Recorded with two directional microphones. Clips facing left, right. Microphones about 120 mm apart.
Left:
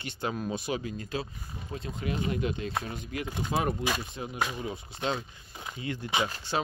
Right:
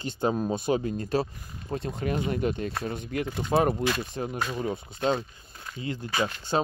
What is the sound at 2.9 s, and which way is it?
Speech, 60° right (ahead or behind).